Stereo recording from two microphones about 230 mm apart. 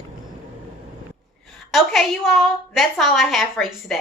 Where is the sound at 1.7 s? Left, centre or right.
Centre.